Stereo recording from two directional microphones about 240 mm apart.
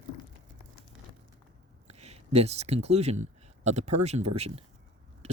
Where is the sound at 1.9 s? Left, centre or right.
Right.